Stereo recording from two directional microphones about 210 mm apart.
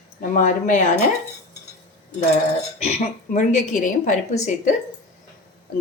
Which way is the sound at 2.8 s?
30° left (ahead or behind).